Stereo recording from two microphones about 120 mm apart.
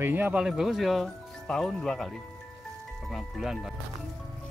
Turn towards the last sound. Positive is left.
turn(degrees=0)  # may be behind; listen again after turning